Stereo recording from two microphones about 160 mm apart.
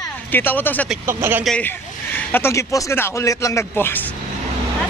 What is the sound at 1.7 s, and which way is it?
Speech, 15° left (ahead or behind).